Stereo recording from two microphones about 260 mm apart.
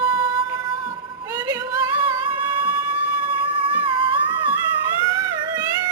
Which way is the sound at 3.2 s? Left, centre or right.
Centre.